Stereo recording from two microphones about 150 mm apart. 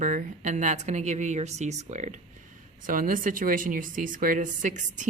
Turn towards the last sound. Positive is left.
turn(degrees=-55)  # may be behind; listen again after turning